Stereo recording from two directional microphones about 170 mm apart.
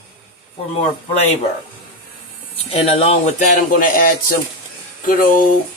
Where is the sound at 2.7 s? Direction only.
35° left (ahead or behind); by 4.4 s 55° left (ahead or behind).